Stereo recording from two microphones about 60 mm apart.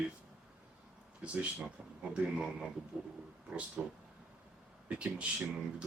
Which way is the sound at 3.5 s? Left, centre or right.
Centre.